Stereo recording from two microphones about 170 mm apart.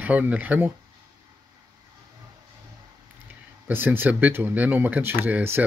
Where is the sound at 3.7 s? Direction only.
10° right (ahead or behind).